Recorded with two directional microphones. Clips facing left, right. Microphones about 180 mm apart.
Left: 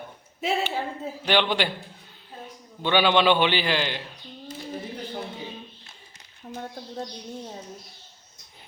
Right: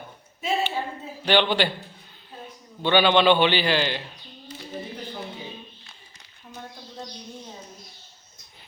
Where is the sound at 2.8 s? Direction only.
10° left (ahead or behind).